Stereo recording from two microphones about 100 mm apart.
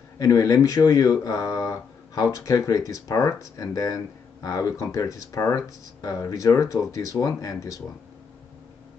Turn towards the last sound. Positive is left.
turn(degrees=35)  # may be behind; listen again after turning